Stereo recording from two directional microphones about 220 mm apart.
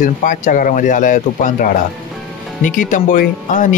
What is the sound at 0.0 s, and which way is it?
Speech, 40° left (ahead or behind).